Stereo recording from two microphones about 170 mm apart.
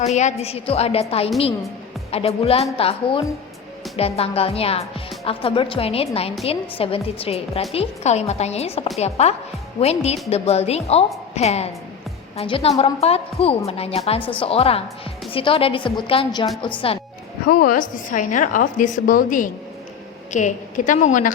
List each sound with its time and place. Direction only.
0.0 s a woman's voice: 40° left (ahead or behind)
17.4 s a woman's voice: 60° left (ahead or behind)